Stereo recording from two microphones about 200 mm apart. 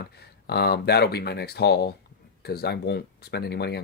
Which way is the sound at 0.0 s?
55° left (ahead or behind).